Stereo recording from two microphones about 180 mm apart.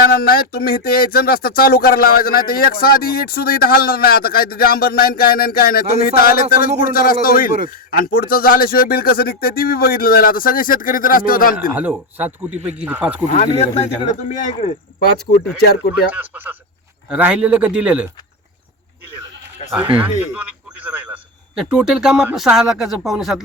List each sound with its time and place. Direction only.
0.0 s a man's voice: 55° left (ahead or behind)
11.7 s a man's voice: 10° right (ahead or behind)
13.3 s speech: 35° left (ahead or behind); by 15.1 s 50° left (ahead or behind)
15.9 s a man's voice: 10° right (ahead or behind)
20.8 s a man's voice: 10° right (ahead or behind)